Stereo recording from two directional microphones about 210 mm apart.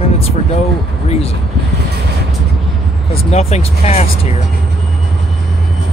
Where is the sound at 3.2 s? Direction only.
30° left (ahead or behind).